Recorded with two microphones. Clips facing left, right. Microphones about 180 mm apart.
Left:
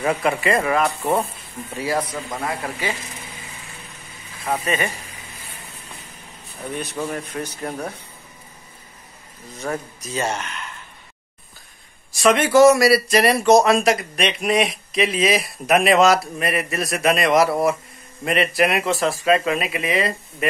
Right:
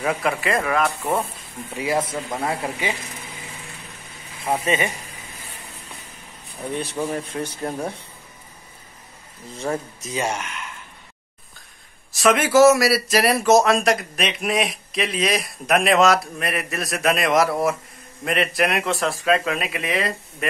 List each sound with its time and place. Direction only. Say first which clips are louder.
0.0 s speech: left 2 dB; centre (ahead or behind)
1.8 s speech: right 1 dB; 25° right (ahead or behind)
4.5 s speech: right 1 dB; 20° right (ahead or behind)
6.7 s speech: right 1 dB; 30° right (ahead or behind)
9.6 s speech: right 1 dB; 25° right (ahead or behind)
10.1 s speech: left 1 dB; 10° right (ahead or behind)
12.1 s speech: left 1 dB; centre (ahead or behind)